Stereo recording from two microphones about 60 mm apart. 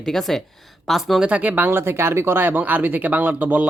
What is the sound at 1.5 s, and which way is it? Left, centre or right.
Speech, right.